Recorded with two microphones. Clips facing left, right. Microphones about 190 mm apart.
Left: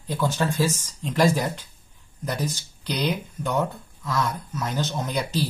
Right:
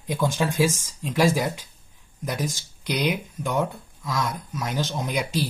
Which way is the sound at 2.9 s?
10° right (ahead or behind).